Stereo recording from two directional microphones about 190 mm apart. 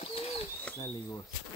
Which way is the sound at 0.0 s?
30° left (ahead or behind).